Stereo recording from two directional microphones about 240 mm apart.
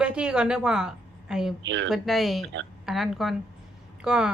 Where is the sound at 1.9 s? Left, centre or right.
Centre.